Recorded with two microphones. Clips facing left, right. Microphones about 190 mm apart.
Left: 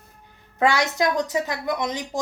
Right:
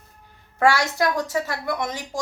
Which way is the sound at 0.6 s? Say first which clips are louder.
Right 1 dB; 20° left (ahead or behind).